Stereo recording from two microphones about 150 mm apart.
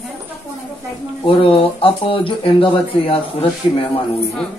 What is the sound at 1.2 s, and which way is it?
Speech, 40° left (ahead or behind).